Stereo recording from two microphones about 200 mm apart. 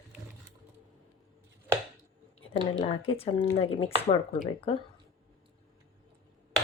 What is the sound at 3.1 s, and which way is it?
Speech, 25° left (ahead or behind).